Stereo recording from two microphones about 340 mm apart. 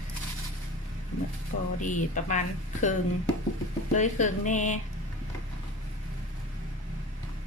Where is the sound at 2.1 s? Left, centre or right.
Left.